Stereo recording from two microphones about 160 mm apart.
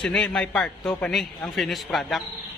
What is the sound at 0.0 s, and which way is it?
A man's voice, 5° left (ahead or behind).